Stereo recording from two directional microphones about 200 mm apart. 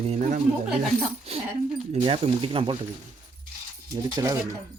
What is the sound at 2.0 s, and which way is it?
Speech, 25° right (ahead or behind).